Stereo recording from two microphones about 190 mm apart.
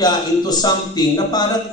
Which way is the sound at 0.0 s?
20° left (ahead or behind).